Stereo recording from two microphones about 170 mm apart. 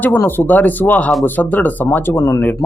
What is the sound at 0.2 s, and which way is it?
Speech, 10° left (ahead or behind).